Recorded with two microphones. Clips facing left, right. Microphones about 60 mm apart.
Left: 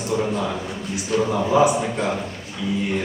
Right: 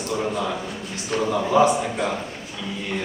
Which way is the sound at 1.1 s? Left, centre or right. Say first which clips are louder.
Left 3 dB; right.